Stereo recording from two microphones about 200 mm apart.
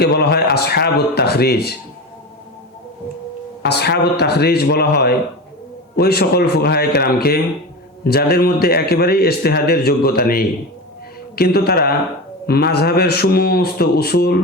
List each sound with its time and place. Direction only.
0.0 s a man's voice: 55° left (ahead or behind)
3.6 s a man's voice: 55° left (ahead or behind)